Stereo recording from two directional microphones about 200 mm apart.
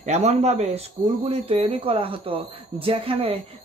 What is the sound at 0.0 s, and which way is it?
A man's voice, 35° right (ahead or behind).